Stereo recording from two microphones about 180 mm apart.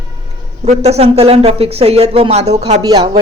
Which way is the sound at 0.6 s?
40° right (ahead or behind).